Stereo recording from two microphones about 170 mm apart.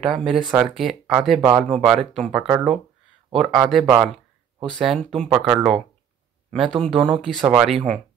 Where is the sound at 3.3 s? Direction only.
Centre (ahead or behind).